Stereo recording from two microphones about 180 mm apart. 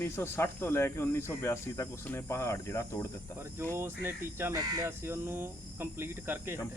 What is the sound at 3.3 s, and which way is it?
Speech, 15° right (ahead or behind).